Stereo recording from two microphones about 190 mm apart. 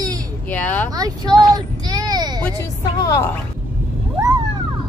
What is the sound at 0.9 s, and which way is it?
Speech, 20° right (ahead or behind).